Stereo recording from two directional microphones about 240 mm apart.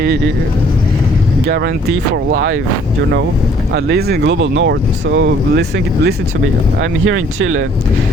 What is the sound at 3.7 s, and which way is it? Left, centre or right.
Speech, right.